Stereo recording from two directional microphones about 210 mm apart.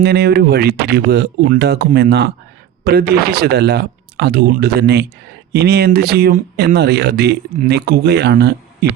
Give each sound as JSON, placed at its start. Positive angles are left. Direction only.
{"t": 0.0, "sound": "speech", "side_deg": -50}